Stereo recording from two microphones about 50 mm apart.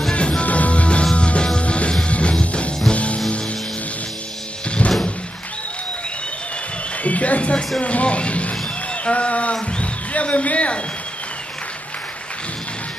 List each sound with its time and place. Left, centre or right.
0.1 s music: left
4.6 s music: left
7.0 s a sound: left
7.8 s speech: left